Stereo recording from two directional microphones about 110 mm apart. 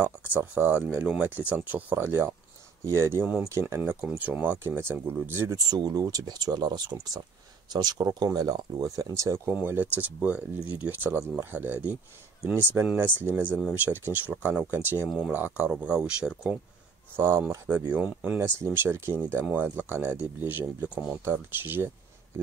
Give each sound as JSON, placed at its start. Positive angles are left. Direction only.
{"t": 0.0, "sound": "speech", "side_deg": -20}
{"t": 5.7, "sound": "speech", "side_deg": -35}
{"t": 17.1, "sound": "speech", "side_deg": -20}